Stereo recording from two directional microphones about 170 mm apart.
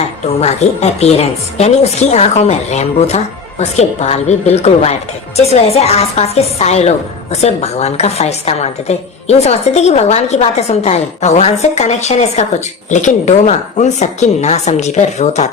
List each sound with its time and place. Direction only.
0.3 s a woman's voice: 40° left (ahead or behind)